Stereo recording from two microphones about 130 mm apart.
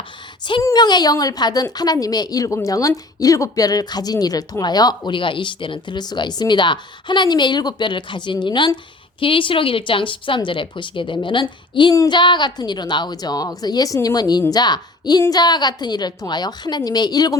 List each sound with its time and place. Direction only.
0.6 s a woman's voice: 30° left (ahead or behind)